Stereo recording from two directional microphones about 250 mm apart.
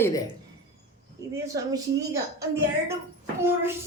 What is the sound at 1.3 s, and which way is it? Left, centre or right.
A woman's voice, centre.